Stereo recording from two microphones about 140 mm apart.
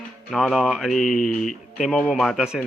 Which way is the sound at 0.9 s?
70° left (ahead or behind).